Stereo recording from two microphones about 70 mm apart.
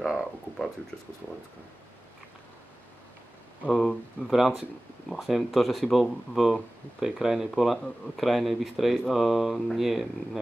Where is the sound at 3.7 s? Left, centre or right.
Centre.